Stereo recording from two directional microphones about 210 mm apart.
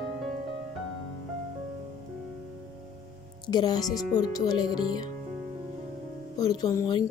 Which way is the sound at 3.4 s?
20° left (ahead or behind).